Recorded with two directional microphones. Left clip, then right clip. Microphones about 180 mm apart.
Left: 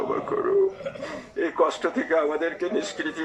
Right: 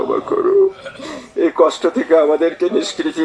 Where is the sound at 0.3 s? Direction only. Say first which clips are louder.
Right 10 dB; 25° right (ahead or behind).